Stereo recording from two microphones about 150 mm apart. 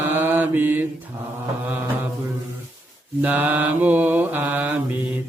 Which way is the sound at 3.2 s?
10° right (ahead or behind).